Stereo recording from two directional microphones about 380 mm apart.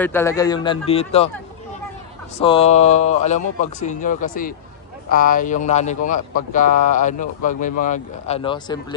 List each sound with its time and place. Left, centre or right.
0.0 s speech: centre
2.3 s speech: centre